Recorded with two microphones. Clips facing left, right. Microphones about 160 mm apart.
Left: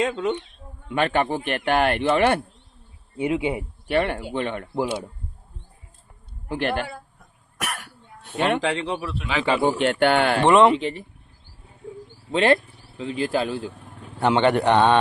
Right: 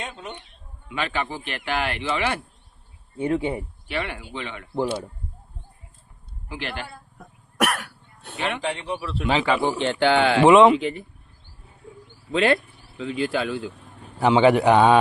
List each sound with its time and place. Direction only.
0.0 s speech: 90° left
0.9 s speech: 50° left (ahead or behind)
3.2 s speech: 10° left (ahead or behind)
3.8 s speech: 50° left (ahead or behind)
6.5 s speech: 55° left (ahead or behind)
7.2 s cough: 70° right (ahead or behind)
8.4 s speech: 55° left (ahead or behind)
8.6 s speech: 90° left
9.6 s speech: 55° left (ahead or behind)
10.4 s a man's voice: centre (ahead or behind)
10.8 s speech: 30° left (ahead or behind)
12.3 s speech: 35° left (ahead or behind)
13.7 s a sound: 70° left (ahead or behind)
14.2 s a man's voice: 5° right (ahead or behind)